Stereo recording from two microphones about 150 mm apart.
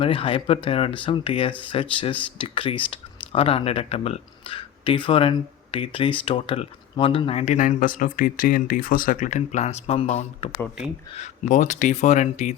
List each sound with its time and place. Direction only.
0.0 s speech: 35° left (ahead or behind)
7.4 s speech: 55° left (ahead or behind)
11.2 s speech: 55° left (ahead or behind)